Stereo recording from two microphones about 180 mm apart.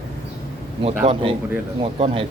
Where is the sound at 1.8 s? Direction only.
35° right (ahead or behind).